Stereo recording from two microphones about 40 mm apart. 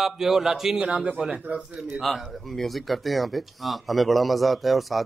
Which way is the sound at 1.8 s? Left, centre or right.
Centre.